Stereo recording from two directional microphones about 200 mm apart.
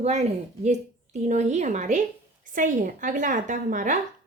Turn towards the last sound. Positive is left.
turn(degrees=-40)  # may be behind; listen again after turning